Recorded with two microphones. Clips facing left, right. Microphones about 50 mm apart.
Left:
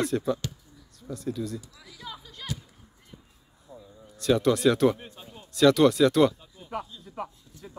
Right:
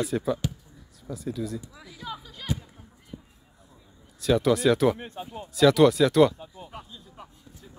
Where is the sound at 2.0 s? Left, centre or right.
Centre.